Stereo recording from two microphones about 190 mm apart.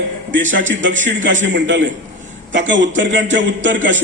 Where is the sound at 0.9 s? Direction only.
40° right (ahead or behind).